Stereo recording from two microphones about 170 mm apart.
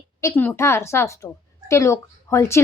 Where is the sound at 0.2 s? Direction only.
15° left (ahead or behind).